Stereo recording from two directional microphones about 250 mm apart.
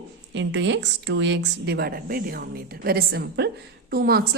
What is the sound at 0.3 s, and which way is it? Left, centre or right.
A woman's voice, right.